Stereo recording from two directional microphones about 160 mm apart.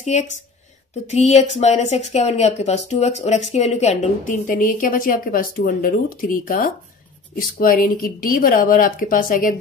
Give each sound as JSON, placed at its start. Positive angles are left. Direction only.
{"t": 0.0, "sound": "speech", "side_deg": 45}